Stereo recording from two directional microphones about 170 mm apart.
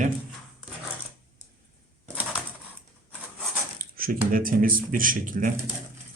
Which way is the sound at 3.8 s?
55° right (ahead or behind).